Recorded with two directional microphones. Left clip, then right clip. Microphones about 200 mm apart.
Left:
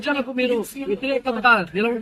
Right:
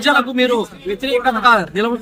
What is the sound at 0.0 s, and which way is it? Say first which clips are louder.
A man's voice: right 8 dB; 15° right (ahead or behind).